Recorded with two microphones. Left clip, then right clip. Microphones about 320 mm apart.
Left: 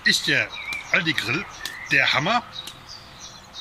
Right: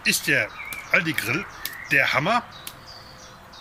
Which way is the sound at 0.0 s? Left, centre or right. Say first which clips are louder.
Left 2 dB; centre.